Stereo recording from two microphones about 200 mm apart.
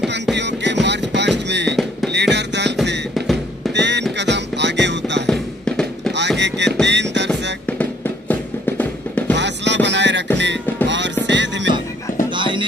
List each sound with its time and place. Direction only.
0.4 s a sound: 60° right (ahead or behind)
0.8 s music: 60° right (ahead or behind)
3.2 s drum: centre (ahead or behind)
3.7 s music: 60° right (ahead or behind)
5.2 s music: 5° left (ahead or behind)
6.1 s music: 60° right (ahead or behind)
7.6 s music: 10° left (ahead or behind)
9.3 s music: 60° right (ahead or behind)
12.4 s music: 25° right (ahead or behind)